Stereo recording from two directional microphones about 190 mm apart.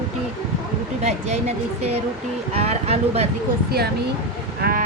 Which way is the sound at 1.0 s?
35° right (ahead or behind).